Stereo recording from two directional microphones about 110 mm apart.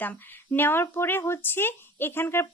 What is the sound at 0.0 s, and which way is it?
Speech, 15° left (ahead or behind).